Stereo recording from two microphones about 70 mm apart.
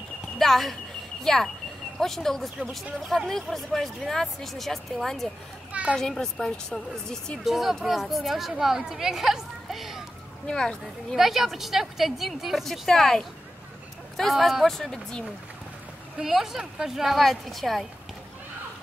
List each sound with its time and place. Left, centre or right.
0.4 s speech: centre
5.7 s children playing: centre
5.9 s speech: centre
7.4 s speech: centre
10.4 s speech: centre
11.1 s speech: centre
16.2 s speech: centre